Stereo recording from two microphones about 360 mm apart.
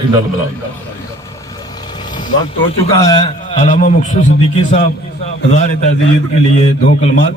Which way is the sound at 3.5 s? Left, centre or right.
Left.